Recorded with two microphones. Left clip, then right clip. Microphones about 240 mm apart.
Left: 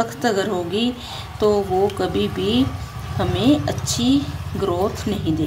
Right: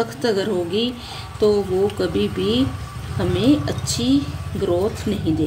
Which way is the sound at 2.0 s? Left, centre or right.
Centre.